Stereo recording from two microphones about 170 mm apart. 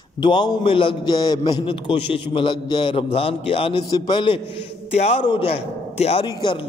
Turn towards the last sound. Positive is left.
turn(degrees=35)  # may be behind; listen again after turning